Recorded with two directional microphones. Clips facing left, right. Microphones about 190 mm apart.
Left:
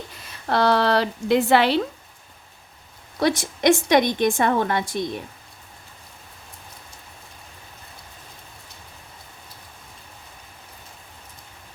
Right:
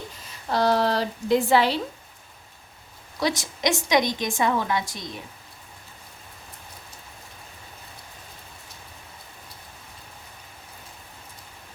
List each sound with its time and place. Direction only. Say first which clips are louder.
0.4 s speech: left 2 dB; 65° left (ahead or behind)
3.2 s a woman's voice: left 5 dB; 55° left (ahead or behind)